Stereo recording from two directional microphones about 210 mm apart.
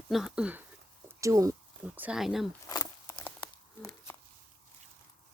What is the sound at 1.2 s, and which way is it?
Speech, 15° right (ahead or behind).